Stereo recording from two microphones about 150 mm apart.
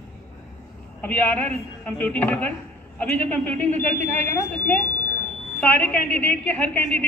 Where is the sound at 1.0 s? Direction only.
10° left (ahead or behind).